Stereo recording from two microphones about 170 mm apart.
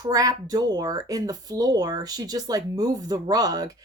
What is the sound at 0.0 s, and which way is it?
Speech, 20° right (ahead or behind).